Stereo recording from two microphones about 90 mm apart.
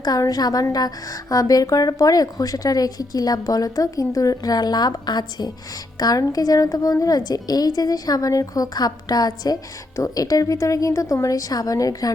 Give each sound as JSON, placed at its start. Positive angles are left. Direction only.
{"t": 0.0, "sound": "a woman's voice", "side_deg": 45}